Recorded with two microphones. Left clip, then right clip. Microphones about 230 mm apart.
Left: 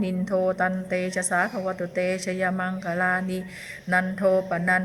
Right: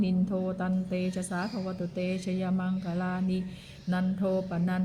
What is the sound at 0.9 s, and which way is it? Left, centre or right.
Speech, centre.